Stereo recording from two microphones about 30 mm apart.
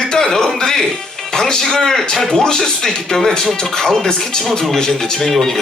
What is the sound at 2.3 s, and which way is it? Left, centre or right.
A man's voice, left.